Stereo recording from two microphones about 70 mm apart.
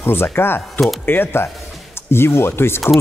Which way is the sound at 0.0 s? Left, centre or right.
Left.